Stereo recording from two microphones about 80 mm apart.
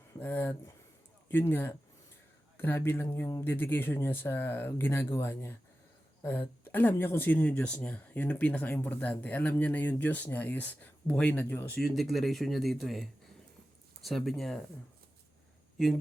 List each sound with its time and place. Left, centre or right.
0.2 s speech: left
6.7 s speech: left
11.8 s speech: centre